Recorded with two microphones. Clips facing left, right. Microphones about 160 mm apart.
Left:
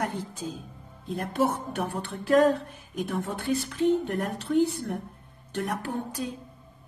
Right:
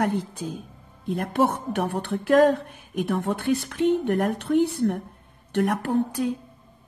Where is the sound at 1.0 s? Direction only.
65° right (ahead or behind).